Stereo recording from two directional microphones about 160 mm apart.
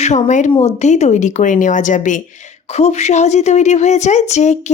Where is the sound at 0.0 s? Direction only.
50° left (ahead or behind).